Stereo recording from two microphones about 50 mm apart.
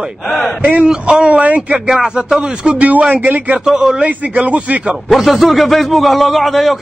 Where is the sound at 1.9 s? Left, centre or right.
Centre; by 3.6 s right.